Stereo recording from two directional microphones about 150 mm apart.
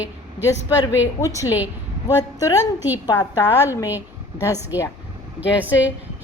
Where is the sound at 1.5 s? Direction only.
10° right (ahead or behind).